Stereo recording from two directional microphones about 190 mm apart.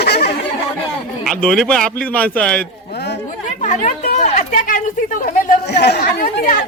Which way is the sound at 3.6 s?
40° left (ahead or behind).